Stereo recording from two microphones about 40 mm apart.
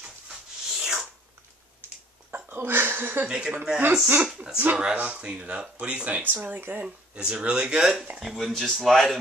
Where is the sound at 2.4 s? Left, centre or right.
Right.